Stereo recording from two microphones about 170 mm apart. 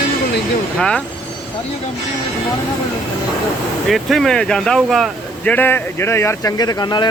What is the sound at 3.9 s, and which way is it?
Speech, centre (ahead or behind).